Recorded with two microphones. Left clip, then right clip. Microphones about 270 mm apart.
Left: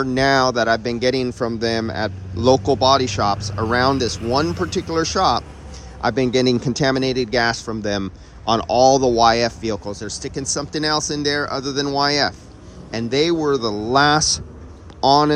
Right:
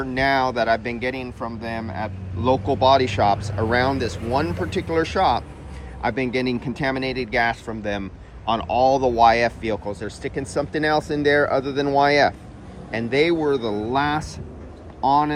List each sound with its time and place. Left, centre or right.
0.0 s speech: centre